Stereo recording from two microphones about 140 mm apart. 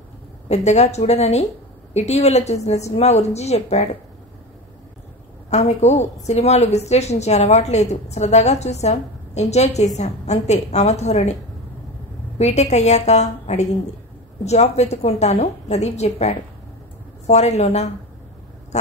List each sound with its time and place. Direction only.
0.5 s a woman's voice: 50° left (ahead or behind)
5.5 s a woman's voice: 55° left (ahead or behind)
12.4 s a woman's voice: 55° left (ahead or behind)